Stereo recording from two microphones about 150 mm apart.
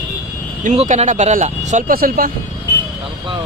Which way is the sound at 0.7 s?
55° right (ahead or behind).